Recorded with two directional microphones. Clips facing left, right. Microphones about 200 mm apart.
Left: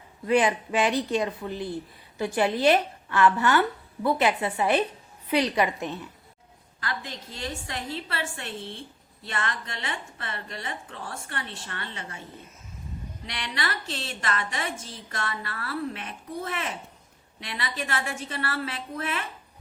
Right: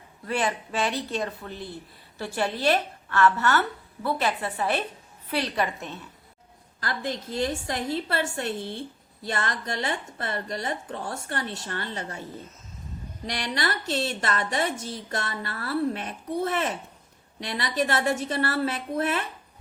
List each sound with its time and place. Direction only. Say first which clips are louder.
0.3 s a woman's voice: left 5 dB; 15° left (ahead or behind)
6.7 s a woman's voice: right 5 dB; 40° right (ahead or behind)
13.2 s a woman's voice: right 4 dB; 40° right (ahead or behind)